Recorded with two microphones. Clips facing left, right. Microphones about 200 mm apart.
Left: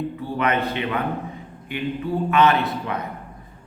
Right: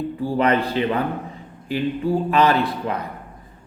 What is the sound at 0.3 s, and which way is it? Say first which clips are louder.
A man's voice: right 4 dB; 35° right (ahead or behind).